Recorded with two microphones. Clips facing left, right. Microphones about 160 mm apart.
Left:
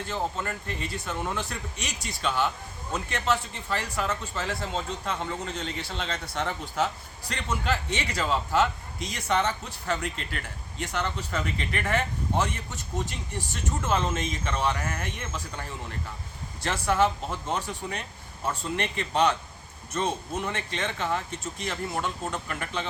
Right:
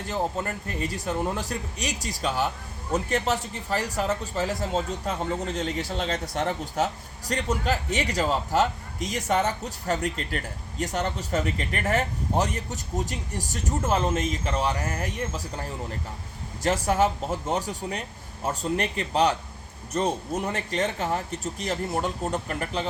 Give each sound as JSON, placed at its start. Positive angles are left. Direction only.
{"t": 0.1, "sound": "speech", "side_deg": -40}
{"t": 16.6, "sound": "speech", "side_deg": -40}